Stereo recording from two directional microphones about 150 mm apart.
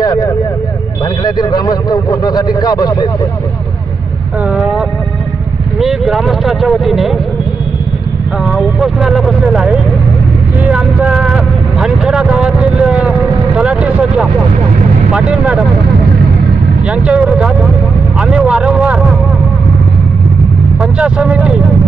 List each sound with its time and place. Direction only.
1.2 s vehicle: 25° left (ahead or behind)
5.8 s speech: centre (ahead or behind)
8.5 s speech: centre (ahead or behind)
13.6 s vehicle: 5° right (ahead or behind)
15.1 s speech: 5° right (ahead or behind)
16.9 s speech: 5° right (ahead or behind)
20.8 s speech: 5° right (ahead or behind)